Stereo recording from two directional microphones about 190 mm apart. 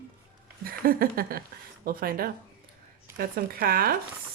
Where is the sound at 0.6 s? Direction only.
50° right (ahead or behind).